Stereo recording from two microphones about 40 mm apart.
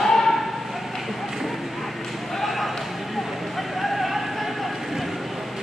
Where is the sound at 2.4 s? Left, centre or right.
Centre.